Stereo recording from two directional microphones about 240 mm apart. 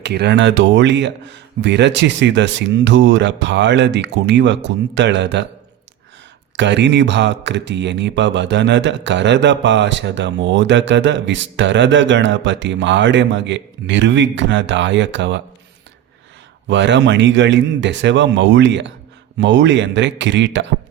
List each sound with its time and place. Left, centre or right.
0.0 s speech: right
6.6 s speech: right
16.6 s speech: right